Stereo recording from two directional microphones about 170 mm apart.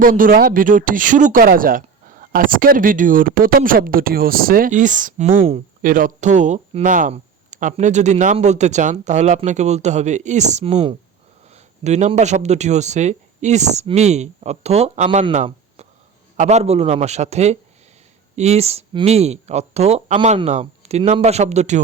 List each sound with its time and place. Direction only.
0.0 s speech: 55° right (ahead or behind); by 5.6 s 40° right (ahead or behind)
5.8 s speech: 55° right (ahead or behind)